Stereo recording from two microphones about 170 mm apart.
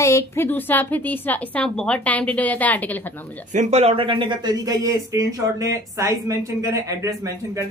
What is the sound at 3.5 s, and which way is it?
A man's voice, 40° right (ahead or behind).